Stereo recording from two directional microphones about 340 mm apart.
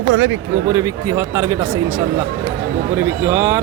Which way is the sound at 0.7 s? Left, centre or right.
Centre.